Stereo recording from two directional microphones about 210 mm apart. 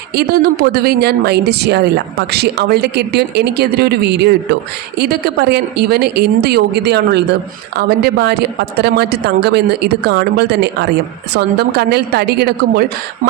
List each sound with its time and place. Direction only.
0.2 s speech: 45° right (ahead or behind)